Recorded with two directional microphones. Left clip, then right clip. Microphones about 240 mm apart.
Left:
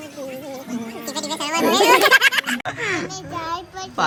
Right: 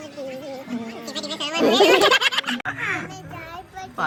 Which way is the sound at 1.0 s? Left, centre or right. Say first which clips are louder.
Left 3 dB; centre.